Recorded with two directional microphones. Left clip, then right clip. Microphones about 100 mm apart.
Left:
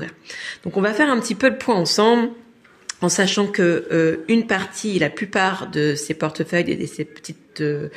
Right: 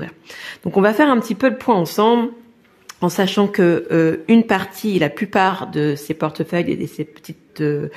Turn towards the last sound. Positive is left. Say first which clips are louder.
# right 2 dB
turn(degrees=-45)  # may be behind; listen again after turning